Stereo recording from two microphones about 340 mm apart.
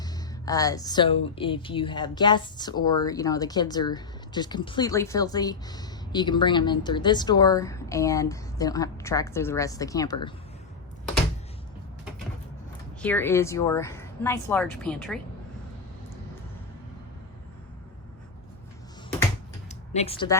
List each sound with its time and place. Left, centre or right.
0.0 s speech: centre
13.0 s speech: centre
19.6 s typing: centre